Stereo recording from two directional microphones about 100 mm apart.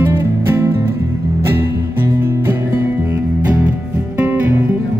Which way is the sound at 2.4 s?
20° right (ahead or behind).